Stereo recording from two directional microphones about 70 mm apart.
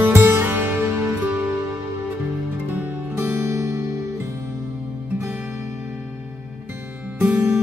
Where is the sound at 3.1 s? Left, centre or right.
Right.